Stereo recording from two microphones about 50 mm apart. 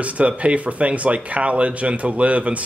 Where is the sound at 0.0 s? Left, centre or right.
Right.